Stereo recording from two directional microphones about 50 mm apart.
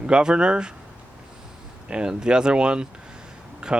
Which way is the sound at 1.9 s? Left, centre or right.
Centre.